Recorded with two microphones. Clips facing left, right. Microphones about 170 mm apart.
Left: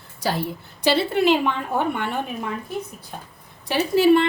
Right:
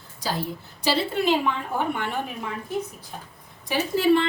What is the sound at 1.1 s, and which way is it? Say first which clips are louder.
Speech: left 4 dB; 70° left (ahead or behind).